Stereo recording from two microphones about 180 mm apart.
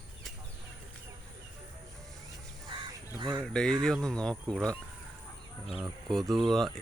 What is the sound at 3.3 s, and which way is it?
Speech, centre (ahead or behind).